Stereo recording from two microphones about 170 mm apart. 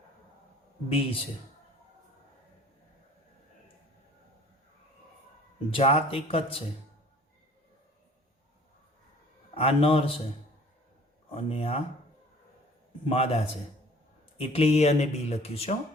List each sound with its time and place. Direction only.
0.9 s speech: 35° left (ahead or behind)
5.7 s speech: 35° left (ahead or behind)
9.6 s speech: 35° left (ahead or behind)
11.3 s speech: 35° left (ahead or behind)
13.1 s speech: 35° left (ahead or behind)